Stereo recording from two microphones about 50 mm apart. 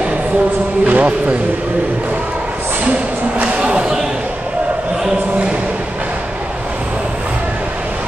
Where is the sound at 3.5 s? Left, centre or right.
Right.